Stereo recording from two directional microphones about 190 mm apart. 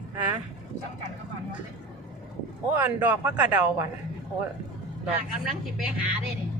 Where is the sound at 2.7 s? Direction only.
10° right (ahead or behind).